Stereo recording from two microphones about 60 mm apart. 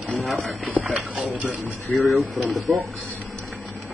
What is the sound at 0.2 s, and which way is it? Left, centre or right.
Speech, centre.